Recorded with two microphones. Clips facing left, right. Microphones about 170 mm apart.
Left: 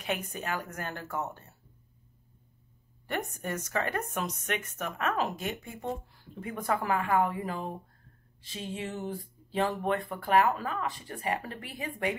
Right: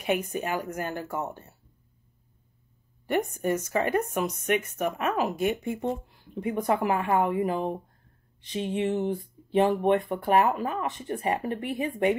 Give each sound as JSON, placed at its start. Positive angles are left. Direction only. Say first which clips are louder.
{"t": 0.0, "sound": "speech", "louder": "right 7 dB", "side_deg": -10}
{"t": 3.1, "sound": "speech", "louder": "right 8 dB", "side_deg": -10}